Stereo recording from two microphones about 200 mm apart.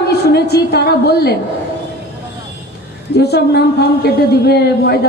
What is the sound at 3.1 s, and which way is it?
A woman's voice, 55° left (ahead or behind).